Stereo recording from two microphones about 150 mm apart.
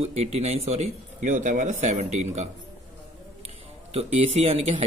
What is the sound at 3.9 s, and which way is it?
Speech, 45° right (ahead or behind).